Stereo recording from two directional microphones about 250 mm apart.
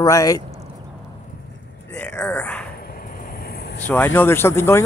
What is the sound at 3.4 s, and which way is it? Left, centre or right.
Vehicle, left.